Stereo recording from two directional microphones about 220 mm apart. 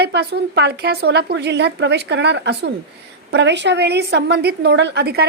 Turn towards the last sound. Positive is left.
turn(degrees=-45)  # may be behind; listen again after turning